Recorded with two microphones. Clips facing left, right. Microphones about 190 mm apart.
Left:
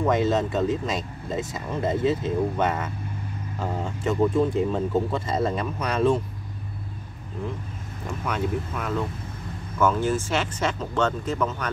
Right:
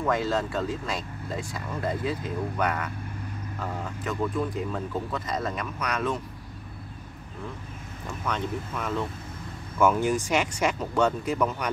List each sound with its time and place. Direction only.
0.0 s speech: 20° left (ahead or behind)
8.3 s speech: 5° left (ahead or behind)
9.8 s speech: 10° right (ahead or behind)